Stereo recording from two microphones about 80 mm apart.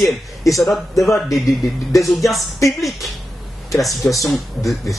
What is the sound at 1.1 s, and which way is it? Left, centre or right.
Speech, left.